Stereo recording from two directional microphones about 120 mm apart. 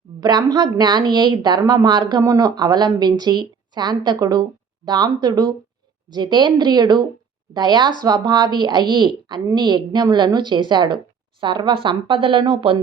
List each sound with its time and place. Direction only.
0.2 s speech: 35° right (ahead or behind)